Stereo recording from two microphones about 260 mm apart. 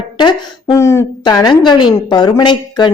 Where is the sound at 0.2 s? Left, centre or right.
Centre.